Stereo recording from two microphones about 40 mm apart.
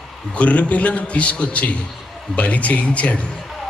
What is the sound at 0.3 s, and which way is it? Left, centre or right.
A man's voice, left.